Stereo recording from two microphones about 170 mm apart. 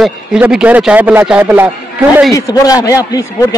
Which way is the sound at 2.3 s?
20° left (ahead or behind).